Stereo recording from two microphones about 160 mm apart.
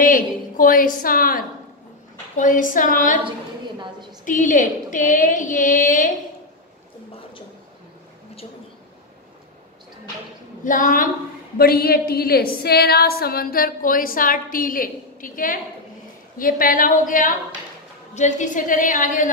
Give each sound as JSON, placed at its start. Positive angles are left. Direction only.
{"t": 0.0, "sound": "a woman's voice", "side_deg": 55}
{"t": 4.2, "sound": "a woman's voice", "side_deg": 55}
{"t": 10.6, "sound": "a woman's voice", "side_deg": 55}
{"t": 11.5, "sound": "a woman's voice", "side_deg": 70}